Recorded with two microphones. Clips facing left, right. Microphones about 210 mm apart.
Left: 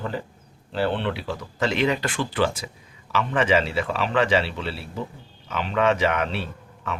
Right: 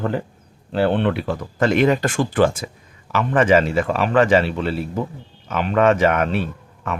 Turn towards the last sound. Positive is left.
turn(degrees=-50)  # may be behind; listen again after turning